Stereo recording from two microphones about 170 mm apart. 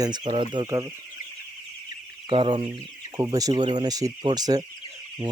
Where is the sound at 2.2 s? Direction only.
30° right (ahead or behind).